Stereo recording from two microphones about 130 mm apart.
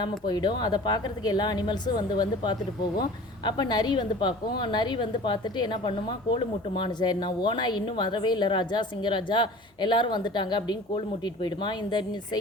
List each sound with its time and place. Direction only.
0.0 s speech: 35° left (ahead or behind)